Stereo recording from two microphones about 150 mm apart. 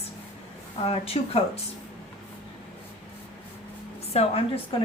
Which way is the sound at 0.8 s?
40° left (ahead or behind).